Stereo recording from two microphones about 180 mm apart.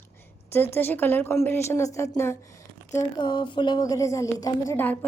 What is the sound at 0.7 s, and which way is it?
A woman's voice, 10° left (ahead or behind).